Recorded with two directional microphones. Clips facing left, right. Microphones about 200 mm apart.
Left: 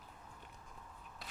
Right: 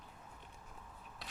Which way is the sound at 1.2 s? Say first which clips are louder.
Right 1 dB; centre (ahead or behind).